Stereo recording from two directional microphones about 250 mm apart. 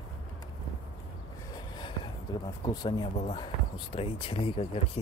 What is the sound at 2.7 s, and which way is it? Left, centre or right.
Speech, centre.